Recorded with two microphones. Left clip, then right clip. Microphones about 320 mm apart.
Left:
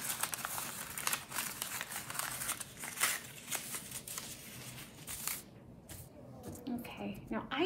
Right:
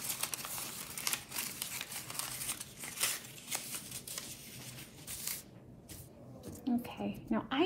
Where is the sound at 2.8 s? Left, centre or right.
Centre.